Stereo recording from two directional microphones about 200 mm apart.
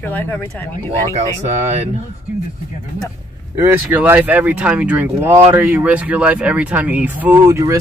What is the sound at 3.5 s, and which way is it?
Speech, 10° right (ahead or behind).